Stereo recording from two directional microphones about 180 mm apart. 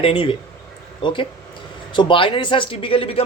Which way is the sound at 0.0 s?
30° left (ahead or behind).